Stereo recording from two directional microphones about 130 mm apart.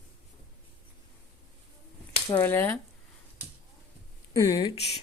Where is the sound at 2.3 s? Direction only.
15° left (ahead or behind).